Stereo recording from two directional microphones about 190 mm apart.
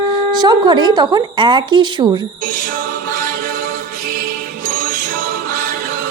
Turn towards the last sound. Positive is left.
turn(degrees=-45)  # may be behind; listen again after turning